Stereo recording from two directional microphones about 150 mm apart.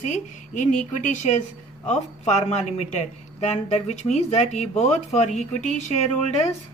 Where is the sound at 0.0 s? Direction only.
55° left (ahead or behind).